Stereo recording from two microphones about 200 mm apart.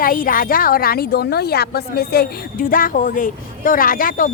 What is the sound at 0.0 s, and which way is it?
Speech, 45° left (ahead or behind).